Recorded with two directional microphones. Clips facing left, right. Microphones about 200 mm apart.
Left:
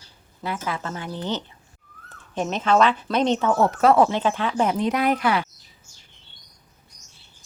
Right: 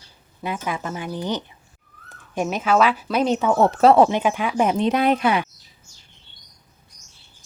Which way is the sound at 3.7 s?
30° right (ahead or behind).